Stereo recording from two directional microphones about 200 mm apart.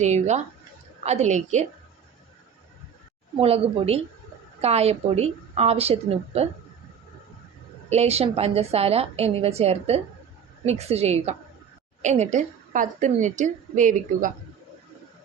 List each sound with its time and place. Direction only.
0.0 s a woman's voice: 35° right (ahead or behind)
3.4 s a woman's voice: 30° right (ahead or behind)
7.9 s a woman's voice: 30° right (ahead or behind)